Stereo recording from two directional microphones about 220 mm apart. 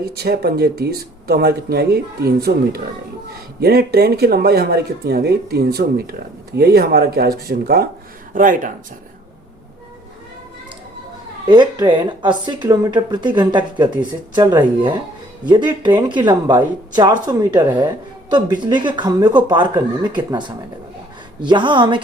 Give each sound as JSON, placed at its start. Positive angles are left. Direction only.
{"t": 0.1, "sound": "speech", "side_deg": -45}
{"t": 11.4, "sound": "speech", "side_deg": -20}
{"t": 21.4, "sound": "speech", "side_deg": -20}